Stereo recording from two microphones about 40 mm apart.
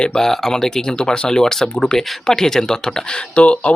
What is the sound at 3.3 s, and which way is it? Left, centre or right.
Speech, left.